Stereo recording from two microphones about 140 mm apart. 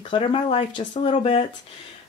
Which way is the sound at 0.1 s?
40° left (ahead or behind).